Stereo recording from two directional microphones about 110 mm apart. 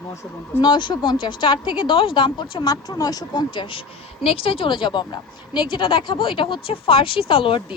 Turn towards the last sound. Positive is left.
turn(degrees=50)  # may be behind; listen again after turning